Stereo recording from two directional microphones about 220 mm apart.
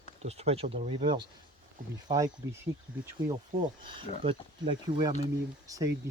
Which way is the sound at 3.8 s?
20° right (ahead or behind).